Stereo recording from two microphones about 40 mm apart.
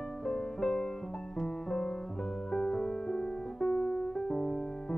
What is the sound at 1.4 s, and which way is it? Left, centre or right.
Piano, centre.